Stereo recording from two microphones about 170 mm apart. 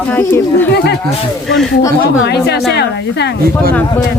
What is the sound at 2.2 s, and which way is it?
Speech, 75° left (ahead or behind).